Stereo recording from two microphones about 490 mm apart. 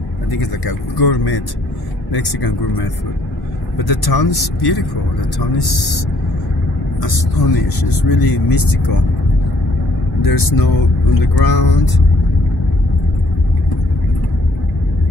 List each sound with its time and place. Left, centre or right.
0.3 s speech: left
3.7 s speech: left
7.0 s speech: left
10.2 s speech: left